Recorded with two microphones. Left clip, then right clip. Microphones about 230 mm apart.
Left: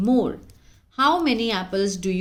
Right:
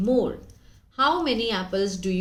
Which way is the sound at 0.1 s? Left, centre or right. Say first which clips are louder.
Even; left.